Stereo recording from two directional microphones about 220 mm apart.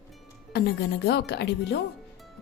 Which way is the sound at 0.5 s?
50° left (ahead or behind).